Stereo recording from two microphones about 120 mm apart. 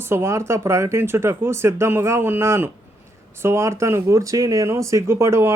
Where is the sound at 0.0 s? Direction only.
20° right (ahead or behind).